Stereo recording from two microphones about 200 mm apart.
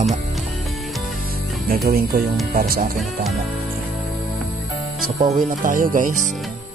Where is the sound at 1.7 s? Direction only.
45° right (ahead or behind).